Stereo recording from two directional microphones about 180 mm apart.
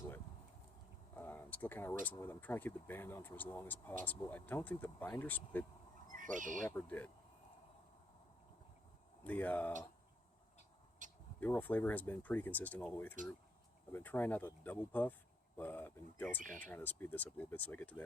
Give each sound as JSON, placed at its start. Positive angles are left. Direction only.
{"t": 1.1, "sound": "a sound", "side_deg": 10}
{"t": 2.1, "sound": "speech", "side_deg": 10}
{"t": 6.1, "sound": "speech", "side_deg": -45}
{"t": 6.7, "sound": "speech", "side_deg": 10}
{"t": 9.2, "sound": "speech", "side_deg": 10}
{"t": 11.0, "sound": "a sound", "side_deg": -45}
{"t": 11.3, "sound": "speech", "side_deg": 10}